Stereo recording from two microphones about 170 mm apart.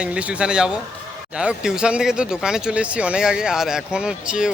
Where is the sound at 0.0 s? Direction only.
5° right (ahead or behind).